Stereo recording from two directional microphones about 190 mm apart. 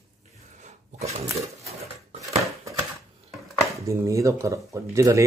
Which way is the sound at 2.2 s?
15° right (ahead or behind).